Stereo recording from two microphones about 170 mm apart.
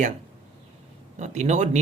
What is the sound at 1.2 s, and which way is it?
Speech, 40° right (ahead or behind).